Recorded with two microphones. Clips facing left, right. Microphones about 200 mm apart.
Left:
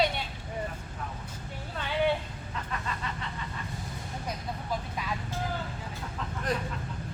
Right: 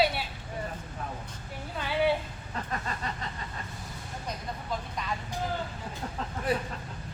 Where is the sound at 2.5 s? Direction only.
40° right (ahead or behind).